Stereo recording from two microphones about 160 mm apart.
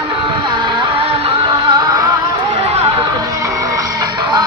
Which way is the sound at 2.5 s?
40° right (ahead or behind).